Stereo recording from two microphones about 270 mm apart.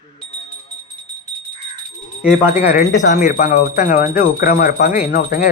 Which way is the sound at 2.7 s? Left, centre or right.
Left.